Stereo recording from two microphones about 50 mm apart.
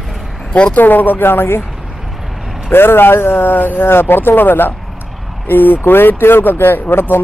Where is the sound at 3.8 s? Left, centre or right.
Left.